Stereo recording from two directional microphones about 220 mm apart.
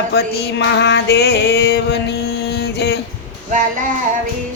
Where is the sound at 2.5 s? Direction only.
50° left (ahead or behind).